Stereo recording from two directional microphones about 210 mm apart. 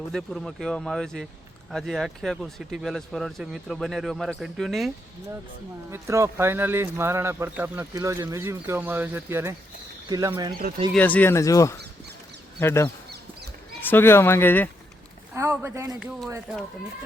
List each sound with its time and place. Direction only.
0.1 s speech: centre (ahead or behind)
5.9 s speech: 15° right (ahead or behind)
10.9 s speech: 10° left (ahead or behind)
15.3 s speech: 10° right (ahead or behind)